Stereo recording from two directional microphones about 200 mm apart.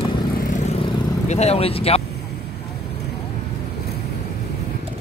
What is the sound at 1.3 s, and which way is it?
Vehicle, 30° left (ahead or behind).